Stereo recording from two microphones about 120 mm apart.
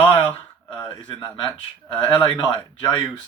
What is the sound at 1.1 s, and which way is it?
Speech, 40° left (ahead or behind).